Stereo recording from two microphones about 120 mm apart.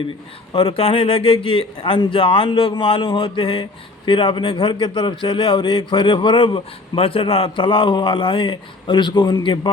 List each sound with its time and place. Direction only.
0.5 s a man's voice: 45° left (ahead or behind)